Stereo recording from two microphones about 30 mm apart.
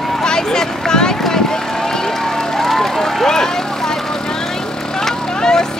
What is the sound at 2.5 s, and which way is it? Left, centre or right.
Run, centre.